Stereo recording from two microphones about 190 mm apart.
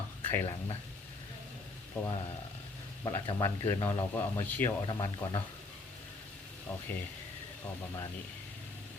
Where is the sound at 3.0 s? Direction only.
20° left (ahead or behind).